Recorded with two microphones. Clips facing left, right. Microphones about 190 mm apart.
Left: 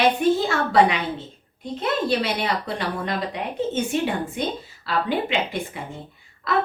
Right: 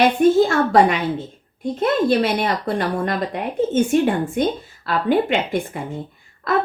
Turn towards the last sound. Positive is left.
turn(degrees=-50)  # may be behind; listen again after turning